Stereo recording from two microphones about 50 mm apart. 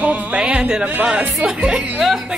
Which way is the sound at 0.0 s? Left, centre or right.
Right.